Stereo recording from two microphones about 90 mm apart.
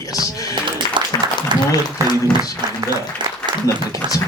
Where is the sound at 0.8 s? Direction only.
45° left (ahead or behind).